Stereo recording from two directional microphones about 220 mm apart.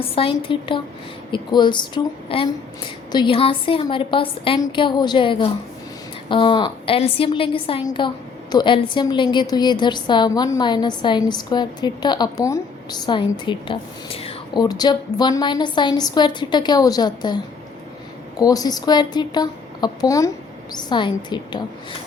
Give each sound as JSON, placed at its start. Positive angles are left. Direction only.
{"t": 0.0, "sound": "a woman's voice", "side_deg": 25}